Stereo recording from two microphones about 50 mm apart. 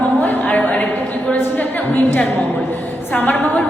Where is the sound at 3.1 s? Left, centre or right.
Left.